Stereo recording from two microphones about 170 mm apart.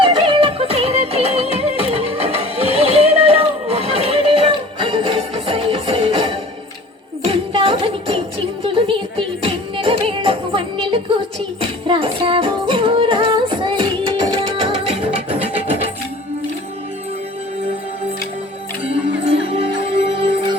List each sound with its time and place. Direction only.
0.0 s music: 30° right (ahead or behind)
7.3 s jingle bell: 35° right (ahead or behind)
8.6 s music: 30° right (ahead or behind)
18.9 s music: 35° right (ahead or behind)